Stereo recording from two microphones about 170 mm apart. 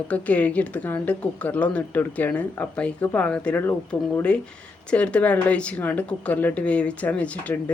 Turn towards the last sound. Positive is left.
turn(degrees=10)  # may be behind; listen again after turning